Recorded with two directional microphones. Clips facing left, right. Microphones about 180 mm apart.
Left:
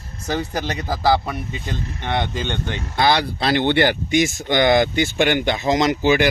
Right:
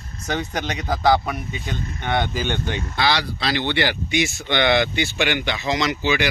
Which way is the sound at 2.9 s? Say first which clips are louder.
Left 5 dB; 50° left (ahead or behind).